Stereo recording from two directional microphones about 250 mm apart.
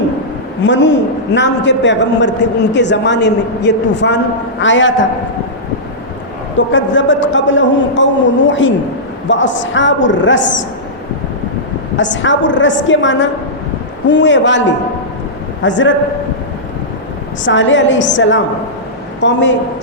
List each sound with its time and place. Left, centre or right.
0.6 s a man's voice: left
6.7 s a man's voice: left
11.9 s a man's voice: left
15.6 s a man's voice: left
17.4 s a man's voice: left